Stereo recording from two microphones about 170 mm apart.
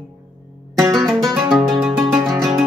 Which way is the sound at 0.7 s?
20° right (ahead or behind).